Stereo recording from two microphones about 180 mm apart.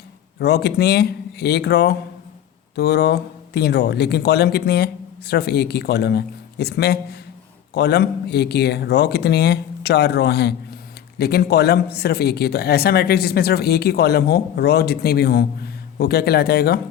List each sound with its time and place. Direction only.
0.3 s speech: 65° left (ahead or behind)